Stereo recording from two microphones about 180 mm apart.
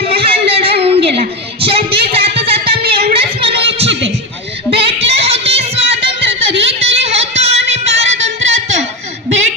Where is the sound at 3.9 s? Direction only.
90° right.